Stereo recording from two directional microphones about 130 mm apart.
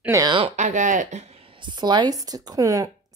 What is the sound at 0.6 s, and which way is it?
Speech, 75° right (ahead or behind).